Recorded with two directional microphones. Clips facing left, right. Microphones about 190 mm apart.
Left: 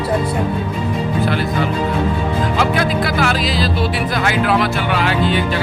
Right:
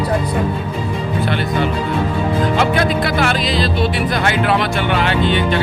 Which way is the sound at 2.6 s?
Centre (ahead or behind).